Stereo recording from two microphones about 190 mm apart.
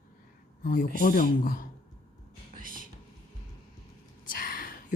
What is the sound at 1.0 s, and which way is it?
Speech, 45° left (ahead or behind).